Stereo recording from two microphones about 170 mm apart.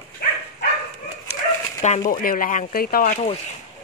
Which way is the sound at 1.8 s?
45° left (ahead or behind).